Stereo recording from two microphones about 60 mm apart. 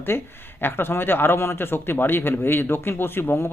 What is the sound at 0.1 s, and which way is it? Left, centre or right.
Speech, left.